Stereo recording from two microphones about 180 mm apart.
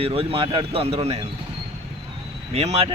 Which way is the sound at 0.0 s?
30° right (ahead or behind).